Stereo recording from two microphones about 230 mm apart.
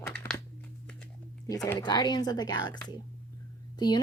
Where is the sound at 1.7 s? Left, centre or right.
Centre.